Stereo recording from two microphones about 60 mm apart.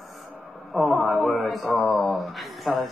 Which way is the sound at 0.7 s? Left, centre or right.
Centre.